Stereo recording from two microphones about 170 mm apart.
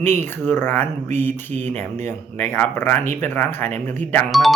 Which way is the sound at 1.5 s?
45° right (ahead or behind).